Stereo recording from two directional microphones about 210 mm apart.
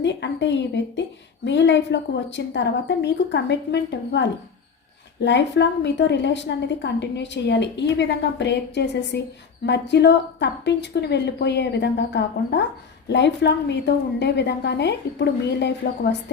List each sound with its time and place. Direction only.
0.0 s a woman's voice: 55° left (ahead or behind)